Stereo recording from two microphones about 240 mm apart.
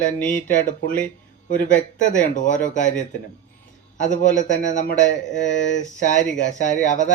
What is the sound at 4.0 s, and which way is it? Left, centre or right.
Speech, left.